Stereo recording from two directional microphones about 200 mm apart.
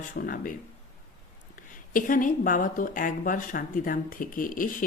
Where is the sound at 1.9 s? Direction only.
40° left (ahead or behind).